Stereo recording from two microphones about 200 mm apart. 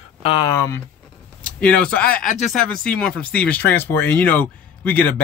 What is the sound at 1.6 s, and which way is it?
Speech, 5° left (ahead or behind).